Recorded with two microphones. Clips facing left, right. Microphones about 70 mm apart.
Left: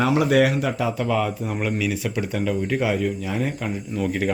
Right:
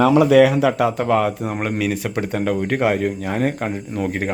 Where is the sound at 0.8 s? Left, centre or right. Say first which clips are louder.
Right 5 dB; right.